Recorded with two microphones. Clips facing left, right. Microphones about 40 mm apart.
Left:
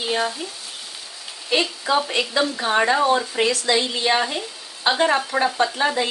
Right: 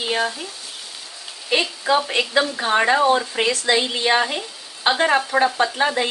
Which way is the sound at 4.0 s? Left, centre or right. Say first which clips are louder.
Right 2 dB; centre.